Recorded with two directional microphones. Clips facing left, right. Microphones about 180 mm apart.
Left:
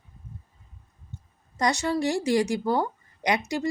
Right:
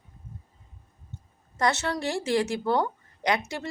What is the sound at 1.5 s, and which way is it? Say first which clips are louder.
A woman's voice: left 2 dB; 15° left (ahead or behind).